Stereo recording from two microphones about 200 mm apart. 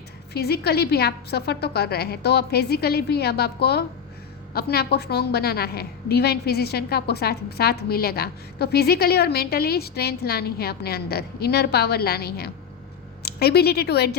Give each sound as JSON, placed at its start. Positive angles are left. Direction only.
{"t": 0.3, "sound": "a woman's voice", "side_deg": 50}